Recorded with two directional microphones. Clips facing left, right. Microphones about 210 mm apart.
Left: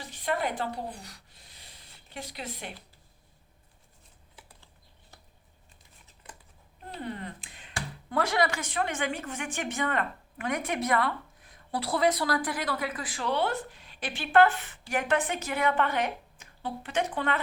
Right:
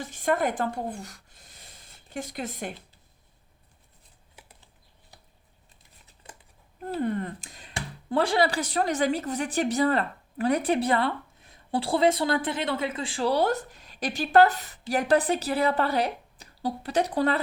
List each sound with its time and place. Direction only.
0.0 s speech: 45° right (ahead or behind)
7.0 s speech: 45° right (ahead or behind)
7.7 s speech: 25° right (ahead or behind)